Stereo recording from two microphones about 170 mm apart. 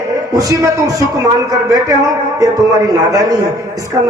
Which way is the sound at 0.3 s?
20° right (ahead or behind).